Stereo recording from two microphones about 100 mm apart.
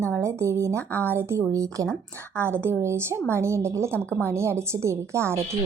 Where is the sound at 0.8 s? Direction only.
15° left (ahead or behind).